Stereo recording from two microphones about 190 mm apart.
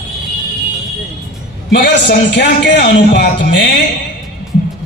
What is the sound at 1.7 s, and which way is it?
A man's voice, 60° left (ahead or behind).